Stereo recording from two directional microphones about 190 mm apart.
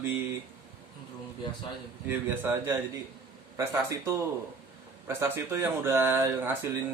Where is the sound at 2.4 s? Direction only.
10° right (ahead or behind).